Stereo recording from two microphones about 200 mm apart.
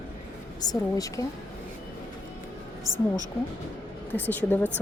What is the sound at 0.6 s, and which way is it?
Speech, 20° left (ahead or behind).